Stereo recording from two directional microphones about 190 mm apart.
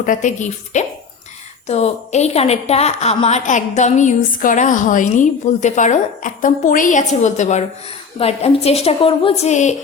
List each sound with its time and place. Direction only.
0.0 s a woman's voice: 40° left (ahead or behind)